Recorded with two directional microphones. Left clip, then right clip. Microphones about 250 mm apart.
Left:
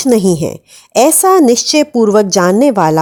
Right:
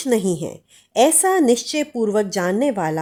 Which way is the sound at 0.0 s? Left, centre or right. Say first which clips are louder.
Left 9 dB; left.